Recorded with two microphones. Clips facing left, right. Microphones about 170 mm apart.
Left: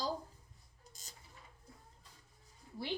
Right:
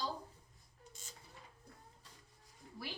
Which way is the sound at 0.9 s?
40° left (ahead or behind).